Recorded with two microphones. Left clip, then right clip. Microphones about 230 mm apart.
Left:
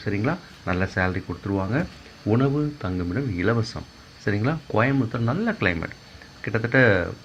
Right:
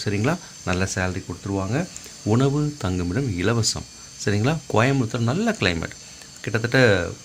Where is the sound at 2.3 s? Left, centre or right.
Right.